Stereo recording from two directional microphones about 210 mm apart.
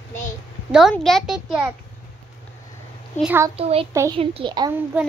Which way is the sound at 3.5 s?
30° right (ahead or behind).